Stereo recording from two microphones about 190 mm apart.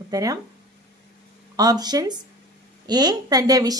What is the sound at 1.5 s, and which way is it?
A woman's voice, 20° right (ahead or behind).